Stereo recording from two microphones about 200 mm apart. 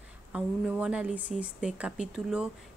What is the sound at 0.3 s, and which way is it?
Speech, 5° right (ahead or behind).